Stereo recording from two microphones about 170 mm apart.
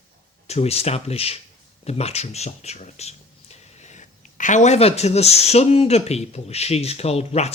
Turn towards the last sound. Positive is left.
turn(degrees=40)  # may be behind; listen again after turning